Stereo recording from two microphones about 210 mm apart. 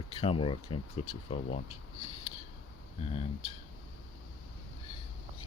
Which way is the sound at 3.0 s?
30° left (ahead or behind).